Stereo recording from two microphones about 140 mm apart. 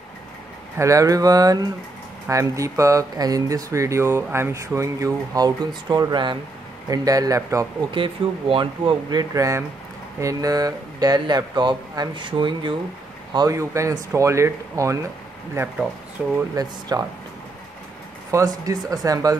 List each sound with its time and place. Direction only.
0.7 s speech: 25° right (ahead or behind)
7.9 s speech: 40° right (ahead or behind); by 15.0 s 20° right (ahead or behind)
16.6 s speech: 30° right (ahead or behind)
18.3 s speech: 25° right (ahead or behind)